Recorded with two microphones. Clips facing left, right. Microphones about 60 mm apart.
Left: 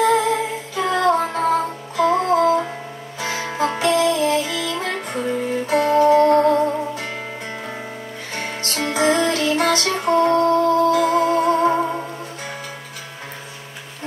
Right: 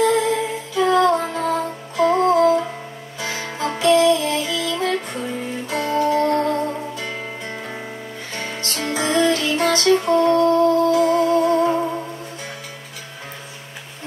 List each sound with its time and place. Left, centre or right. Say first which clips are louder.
0.0 s humming: left 1 dB; left
1.0 s music: left 1 dB; left
2.0 s music: right 1 dB; right
2.3 s music: right 1 dB; left
8.7 s music: left 2 dB; left